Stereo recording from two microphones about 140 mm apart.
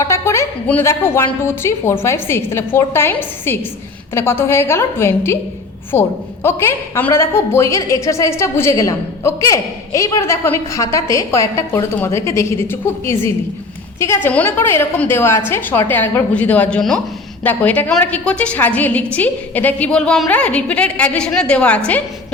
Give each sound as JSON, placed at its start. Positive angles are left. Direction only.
{"t": 0.0, "sound": "a woman's voice", "side_deg": 20}